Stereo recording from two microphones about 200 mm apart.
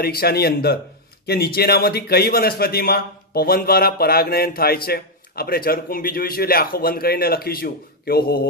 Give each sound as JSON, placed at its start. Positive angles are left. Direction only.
{"t": 0.0, "sound": "a man's voice", "side_deg": 50}